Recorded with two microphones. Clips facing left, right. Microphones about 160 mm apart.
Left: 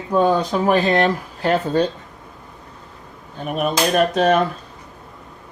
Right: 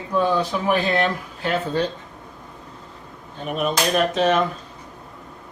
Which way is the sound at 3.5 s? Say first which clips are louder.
Left 3 dB; 45° left (ahead or behind).